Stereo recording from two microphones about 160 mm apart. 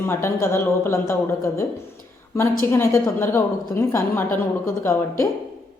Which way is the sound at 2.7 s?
15° left (ahead or behind).